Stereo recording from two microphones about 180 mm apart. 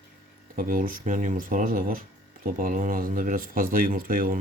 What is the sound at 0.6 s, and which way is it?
Speech, 50° right (ahead or behind).